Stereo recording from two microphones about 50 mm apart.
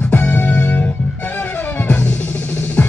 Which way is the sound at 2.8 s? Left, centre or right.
Left.